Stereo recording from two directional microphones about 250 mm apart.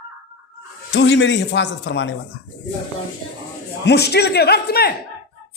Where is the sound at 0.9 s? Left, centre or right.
Left.